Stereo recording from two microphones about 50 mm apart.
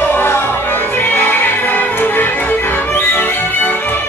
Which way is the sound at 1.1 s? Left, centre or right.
Left.